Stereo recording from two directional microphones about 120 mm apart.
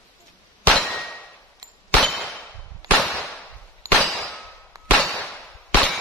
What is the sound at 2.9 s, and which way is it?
Whip, centre (ahead or behind).